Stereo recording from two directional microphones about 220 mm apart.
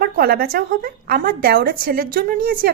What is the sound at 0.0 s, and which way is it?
A woman's voice, 45° right (ahead or behind).